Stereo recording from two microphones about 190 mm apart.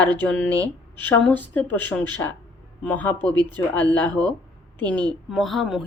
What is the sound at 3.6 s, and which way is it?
A woman's voice, 10° left (ahead or behind).